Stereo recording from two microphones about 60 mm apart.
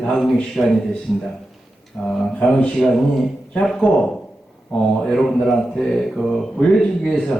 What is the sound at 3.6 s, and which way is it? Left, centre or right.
A man's voice, centre.